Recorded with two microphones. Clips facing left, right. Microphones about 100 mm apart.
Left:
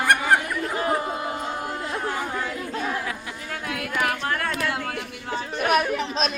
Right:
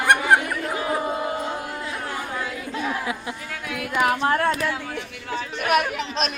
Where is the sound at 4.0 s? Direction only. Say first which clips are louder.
Right 6 dB; 25° right (ahead or behind).